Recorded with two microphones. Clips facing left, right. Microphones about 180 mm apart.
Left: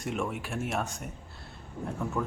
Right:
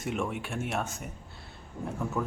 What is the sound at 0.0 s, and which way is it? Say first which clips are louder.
Speech: even; centre (ahead or behind).